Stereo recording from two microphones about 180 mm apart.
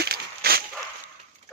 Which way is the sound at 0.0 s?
60° right (ahead or behind).